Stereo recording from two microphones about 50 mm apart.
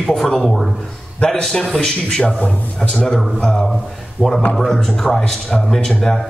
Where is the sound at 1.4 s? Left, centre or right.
Centre.